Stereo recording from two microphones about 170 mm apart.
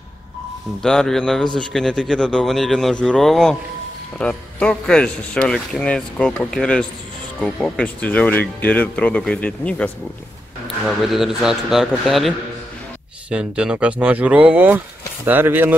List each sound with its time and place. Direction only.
0.8 s a man's voice: 5° left (ahead or behind)
10.9 s a man's voice: centre (ahead or behind)